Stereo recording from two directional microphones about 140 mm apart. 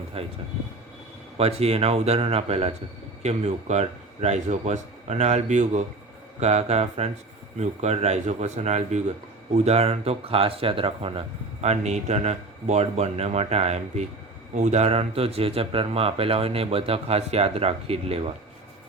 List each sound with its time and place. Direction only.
0.1 s speech: 45° right (ahead or behind)
1.4 s speech: 45° right (ahead or behind)
11.6 s speech: 50° right (ahead or behind)